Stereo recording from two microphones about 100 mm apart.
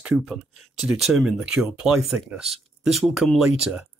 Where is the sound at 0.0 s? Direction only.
5° right (ahead or behind).